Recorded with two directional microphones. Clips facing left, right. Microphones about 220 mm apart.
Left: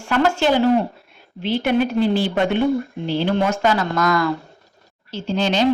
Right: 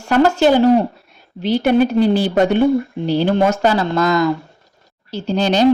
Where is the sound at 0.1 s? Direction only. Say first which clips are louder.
Right 5 dB; 40° right (ahead or behind).